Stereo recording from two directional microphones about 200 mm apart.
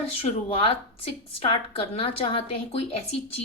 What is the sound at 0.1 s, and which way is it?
A woman's voice, 30° left (ahead or behind).